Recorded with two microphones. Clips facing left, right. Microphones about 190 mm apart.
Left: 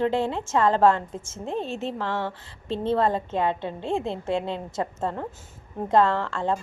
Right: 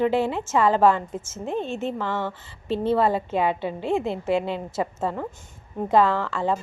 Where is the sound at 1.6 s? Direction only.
35° left (ahead or behind).